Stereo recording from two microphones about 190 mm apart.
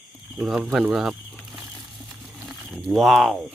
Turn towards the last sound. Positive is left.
turn(degrees=0)  # may be behind; listen again after turning